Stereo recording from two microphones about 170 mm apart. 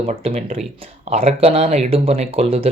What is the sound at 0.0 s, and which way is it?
Speech, 35° right (ahead or behind).